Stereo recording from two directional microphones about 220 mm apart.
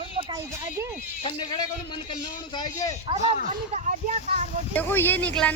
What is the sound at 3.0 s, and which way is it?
Speech, 30° right (ahead or behind).